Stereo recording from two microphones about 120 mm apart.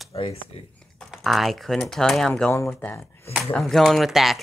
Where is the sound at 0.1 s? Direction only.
55° left (ahead or behind).